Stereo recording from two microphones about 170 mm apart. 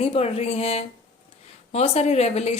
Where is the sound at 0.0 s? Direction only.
35° left (ahead or behind).